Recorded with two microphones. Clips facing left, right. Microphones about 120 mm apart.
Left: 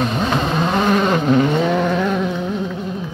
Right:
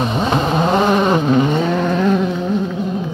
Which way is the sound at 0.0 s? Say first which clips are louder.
Right 2 dB; 20° right (ahead or behind).